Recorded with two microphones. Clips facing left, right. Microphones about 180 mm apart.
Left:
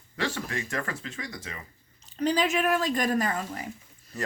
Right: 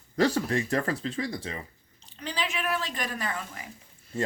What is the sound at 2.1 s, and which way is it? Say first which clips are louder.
A woman's voice: left 8 dB; 45° left (ahead or behind).